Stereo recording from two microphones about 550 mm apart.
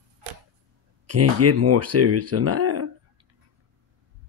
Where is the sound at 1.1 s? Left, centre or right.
Right.